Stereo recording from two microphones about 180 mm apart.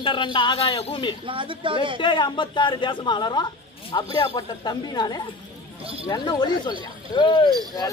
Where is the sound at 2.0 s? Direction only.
25° left (ahead or behind).